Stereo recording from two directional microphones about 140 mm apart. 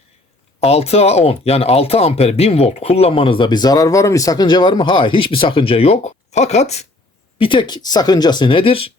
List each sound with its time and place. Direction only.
0.6 s speech: 45° left (ahead or behind)
7.3 s speech: 35° left (ahead or behind)